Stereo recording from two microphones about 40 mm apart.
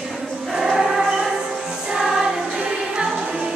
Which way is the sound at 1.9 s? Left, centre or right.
Centre.